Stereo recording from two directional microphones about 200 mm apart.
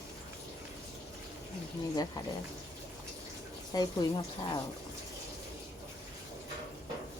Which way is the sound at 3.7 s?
20° left (ahead or behind).